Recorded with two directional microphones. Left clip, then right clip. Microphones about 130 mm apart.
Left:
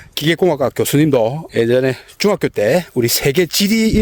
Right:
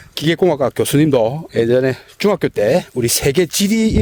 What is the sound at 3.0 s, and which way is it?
Speech, 30° left (ahead or behind).